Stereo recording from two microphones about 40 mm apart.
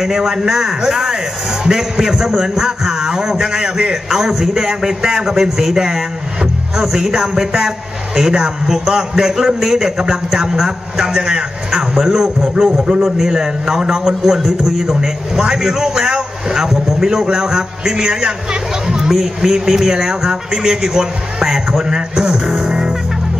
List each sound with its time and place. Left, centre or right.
0.0 s a man's voice: centre